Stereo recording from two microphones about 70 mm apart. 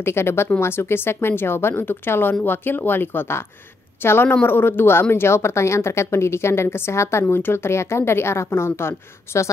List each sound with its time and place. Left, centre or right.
0.0 s a woman's voice: left